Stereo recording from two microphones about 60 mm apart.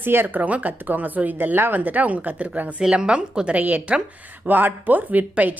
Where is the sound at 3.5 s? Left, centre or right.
Right.